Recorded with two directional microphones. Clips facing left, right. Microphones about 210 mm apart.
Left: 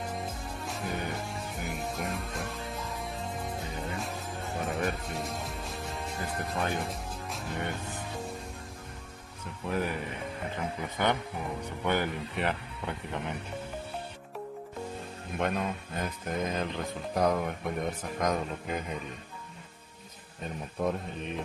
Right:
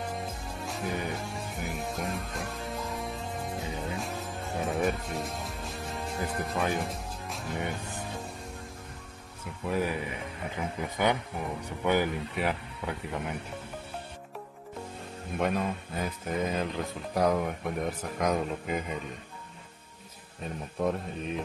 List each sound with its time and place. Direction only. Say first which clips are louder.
0.2 s music: even; centre (ahead or behind)
9.7 s speech: right 2 dB; 5° right (ahead or behind)
15.3 s speech: right 2 dB; centre (ahead or behind)
20.4 s speech: right 1 dB; centre (ahead or behind)